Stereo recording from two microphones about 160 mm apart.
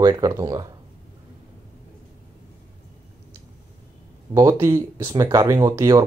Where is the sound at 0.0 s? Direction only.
25° right (ahead or behind).